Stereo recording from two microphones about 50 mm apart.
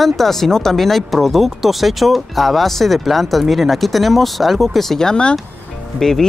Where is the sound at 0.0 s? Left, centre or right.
Centre.